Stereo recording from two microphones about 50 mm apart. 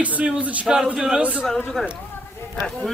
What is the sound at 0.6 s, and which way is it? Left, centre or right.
Speech, centre.